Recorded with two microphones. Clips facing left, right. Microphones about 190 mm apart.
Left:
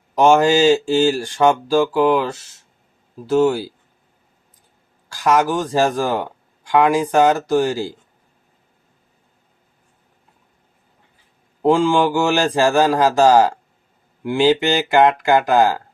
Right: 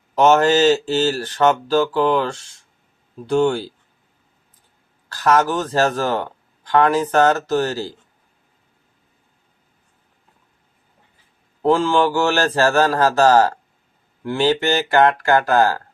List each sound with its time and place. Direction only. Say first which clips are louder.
0.2 s speech: left 1 dB; 10° left (ahead or behind)
5.0 s speech: even; 10° left (ahead or behind)
11.6 s speech: left 1 dB; 15° left (ahead or behind)